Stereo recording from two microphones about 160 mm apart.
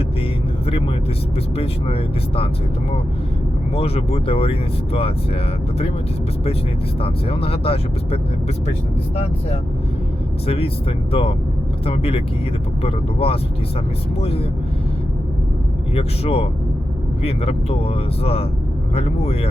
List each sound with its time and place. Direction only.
1.5 s speech: 35° left (ahead or behind)
3.8 s speech: 40° left (ahead or behind)
7.0 s speech: 35° left (ahead or behind)
10.4 s speech: 40° left (ahead or behind)
16.0 s speech: 40° left (ahead or behind)